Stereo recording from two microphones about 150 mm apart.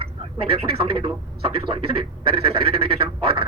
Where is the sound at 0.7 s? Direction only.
35° right (ahead or behind).